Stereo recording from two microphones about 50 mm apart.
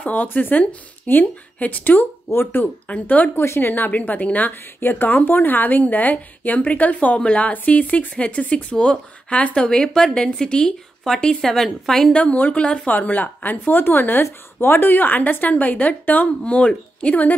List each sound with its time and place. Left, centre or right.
0.0 s a woman's voice: left
2.2 s speech: left
2.9 s a woman's voice: left
3.3 s a woman's voice: left
4.6 s a woman's voice: left
9.6 s speech: centre
12.1 s speech: left
12.9 s a woman's voice: left